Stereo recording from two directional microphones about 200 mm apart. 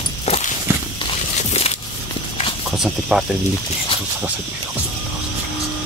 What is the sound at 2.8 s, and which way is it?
Speech, centre (ahead or behind).